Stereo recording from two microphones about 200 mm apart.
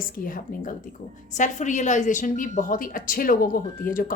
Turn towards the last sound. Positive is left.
turn(degrees=45)  # may be behind; listen again after turning